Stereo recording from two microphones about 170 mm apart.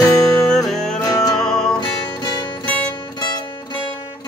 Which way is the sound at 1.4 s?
5° left (ahead or behind).